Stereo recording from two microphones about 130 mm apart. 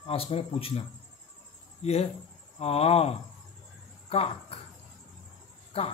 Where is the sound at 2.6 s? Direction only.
50° left (ahead or behind).